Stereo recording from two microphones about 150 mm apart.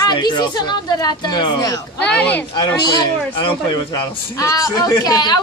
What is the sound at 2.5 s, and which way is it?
Speech, 30° left (ahead or behind).